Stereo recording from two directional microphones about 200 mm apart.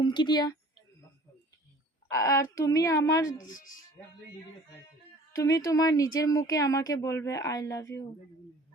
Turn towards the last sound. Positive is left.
turn(degrees=15)  # may be behind; listen again after turning